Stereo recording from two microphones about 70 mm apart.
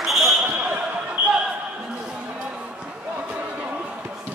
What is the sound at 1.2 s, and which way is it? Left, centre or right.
Basketball bounce, right.